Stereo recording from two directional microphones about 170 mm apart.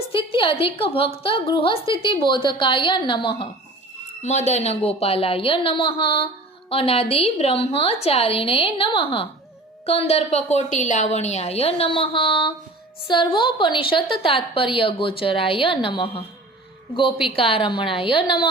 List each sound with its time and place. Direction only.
0.1 s a woman's voice: 30° left (ahead or behind)
4.2 s a woman's voice: 40° left (ahead or behind)
17.2 s a woman's voice: 35° left (ahead or behind)